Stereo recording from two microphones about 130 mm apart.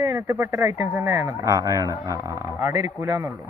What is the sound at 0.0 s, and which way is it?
Speech, 20° right (ahead or behind).